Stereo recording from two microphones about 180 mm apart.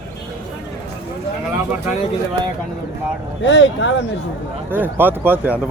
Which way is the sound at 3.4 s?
85° left.